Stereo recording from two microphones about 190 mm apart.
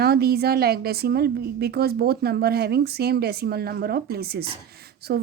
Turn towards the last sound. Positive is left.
turn(degrees=-55)  # may be behind; listen again after turning